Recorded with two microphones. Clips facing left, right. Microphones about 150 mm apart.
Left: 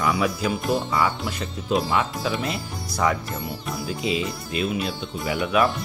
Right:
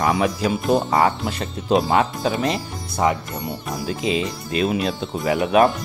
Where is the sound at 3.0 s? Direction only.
25° right (ahead or behind).